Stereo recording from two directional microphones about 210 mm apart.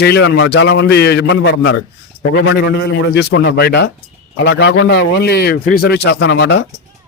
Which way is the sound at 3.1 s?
55° left (ahead or behind).